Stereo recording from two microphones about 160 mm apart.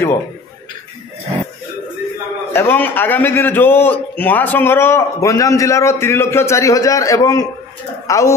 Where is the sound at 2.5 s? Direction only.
15° left (ahead or behind).